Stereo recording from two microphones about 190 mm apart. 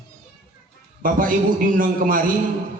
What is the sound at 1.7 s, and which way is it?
Speech, 45° right (ahead or behind).